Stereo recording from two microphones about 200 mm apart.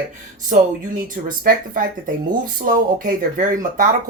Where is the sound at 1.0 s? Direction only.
45° right (ahead or behind).